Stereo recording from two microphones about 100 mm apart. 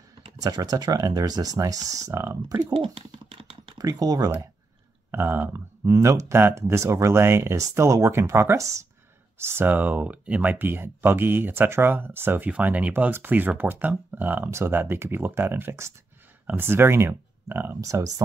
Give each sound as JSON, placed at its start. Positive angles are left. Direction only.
{"t": 0.4, "sound": "speech", "side_deg": -40}
{"t": 2.7, "sound": "typing", "side_deg": -65}
{"t": 3.7, "sound": "speech", "side_deg": -40}
{"t": 5.1, "sound": "speech", "side_deg": -25}
{"t": 5.9, "sound": "speech", "side_deg": -30}
{"t": 17.7, "sound": "speech", "side_deg": -35}